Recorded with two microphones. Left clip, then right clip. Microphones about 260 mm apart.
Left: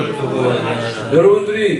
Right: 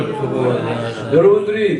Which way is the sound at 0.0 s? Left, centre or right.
Centre.